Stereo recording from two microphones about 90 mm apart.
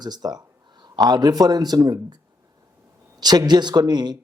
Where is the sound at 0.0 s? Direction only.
50° right (ahead or behind).